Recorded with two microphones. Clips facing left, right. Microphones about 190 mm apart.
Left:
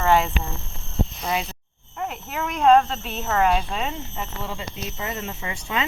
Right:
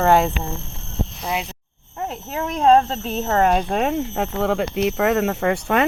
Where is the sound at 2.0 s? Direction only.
30° right (ahead or behind).